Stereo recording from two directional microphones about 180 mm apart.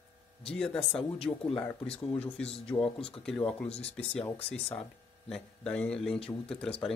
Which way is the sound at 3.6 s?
35° left (ahead or behind).